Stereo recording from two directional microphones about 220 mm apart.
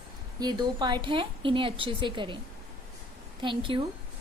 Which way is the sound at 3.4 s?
20° right (ahead or behind).